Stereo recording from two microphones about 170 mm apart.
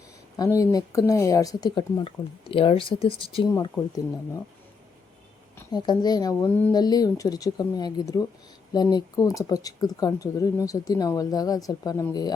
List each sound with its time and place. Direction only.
0.3 s speech: 20° left (ahead or behind)
5.7 s speech: 25° left (ahead or behind)